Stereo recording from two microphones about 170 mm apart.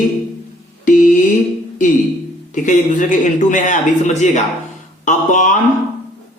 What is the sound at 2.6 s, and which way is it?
A man's voice, 50° left (ahead or behind).